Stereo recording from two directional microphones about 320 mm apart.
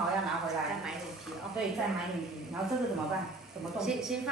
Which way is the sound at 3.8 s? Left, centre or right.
Centre.